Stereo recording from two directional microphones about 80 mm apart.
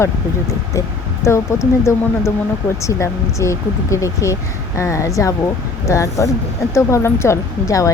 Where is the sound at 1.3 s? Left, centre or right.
Left.